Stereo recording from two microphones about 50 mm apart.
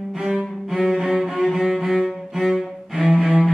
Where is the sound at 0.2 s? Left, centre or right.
Centre.